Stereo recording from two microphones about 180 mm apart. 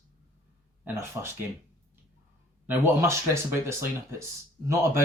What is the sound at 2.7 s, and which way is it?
Speech, 15° right (ahead or behind).